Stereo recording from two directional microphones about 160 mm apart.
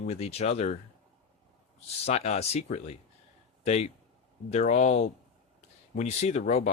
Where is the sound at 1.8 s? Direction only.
40° left (ahead or behind).